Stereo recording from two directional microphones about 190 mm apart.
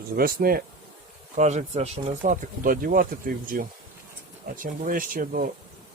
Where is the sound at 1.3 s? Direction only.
40° right (ahead or behind).